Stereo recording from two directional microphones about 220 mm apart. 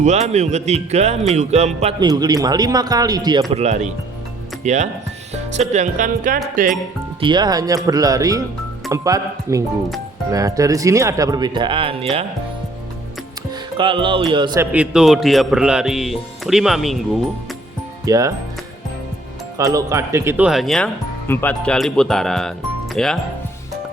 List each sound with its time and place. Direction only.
0.0 s speech: 30° right (ahead or behind)
3.5 s speech: 30° right (ahead or behind)
7.2 s speech: 20° right (ahead or behind)
13.5 s speech: 20° right (ahead or behind); by 17.0 s centre (ahead or behind)
18.0 s speech: 15° right (ahead or behind)
19.5 s speech: 15° right (ahead or behind); by 23.1 s centre (ahead or behind)